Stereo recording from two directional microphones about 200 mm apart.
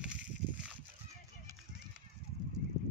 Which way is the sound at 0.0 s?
5° right (ahead or behind).